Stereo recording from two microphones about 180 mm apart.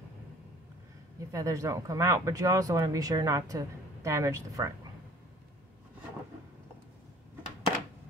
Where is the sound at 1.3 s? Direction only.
20° right (ahead or behind).